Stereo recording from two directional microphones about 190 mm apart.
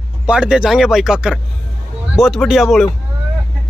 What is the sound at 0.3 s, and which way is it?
A man's voice, 5° right (ahead or behind).